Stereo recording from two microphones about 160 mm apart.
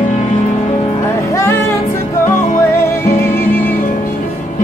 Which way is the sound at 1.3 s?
20° left (ahead or behind).